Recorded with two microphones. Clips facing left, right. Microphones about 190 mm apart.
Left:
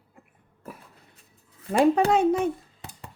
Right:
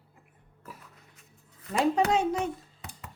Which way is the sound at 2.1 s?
55° left (ahead or behind).